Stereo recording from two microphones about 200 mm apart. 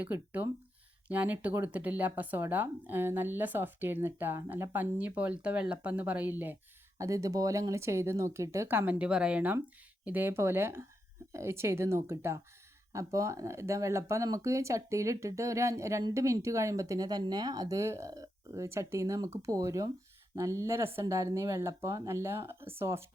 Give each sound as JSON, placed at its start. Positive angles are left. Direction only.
{"t": 0.0, "sound": "speech", "side_deg": -10}